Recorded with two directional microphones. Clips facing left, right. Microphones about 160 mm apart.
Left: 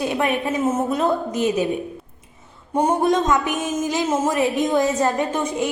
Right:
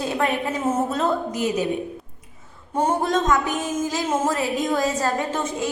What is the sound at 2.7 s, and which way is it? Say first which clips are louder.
A woman's voice: left 3 dB; 15° left (ahead or behind).